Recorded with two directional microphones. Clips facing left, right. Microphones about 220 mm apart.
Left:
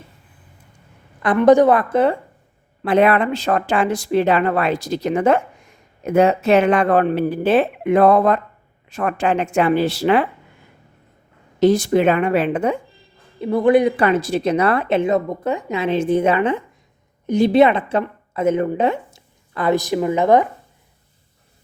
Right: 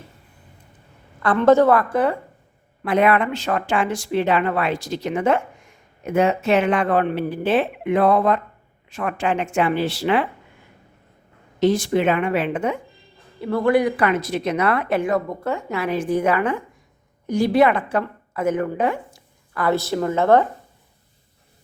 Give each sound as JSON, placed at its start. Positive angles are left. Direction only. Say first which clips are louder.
{"t": 1.2, "sound": "a woman's voice", "louder": "left 3 dB", "side_deg": 15}
{"t": 11.6, "sound": "a woman's voice", "louder": "left 4 dB", "side_deg": 40}
{"t": 13.4, "sound": "a woman's voice", "louder": "left 4 dB", "side_deg": 20}